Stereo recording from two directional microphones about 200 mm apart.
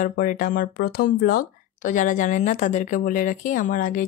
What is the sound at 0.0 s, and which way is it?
Speech, 45° left (ahead or behind).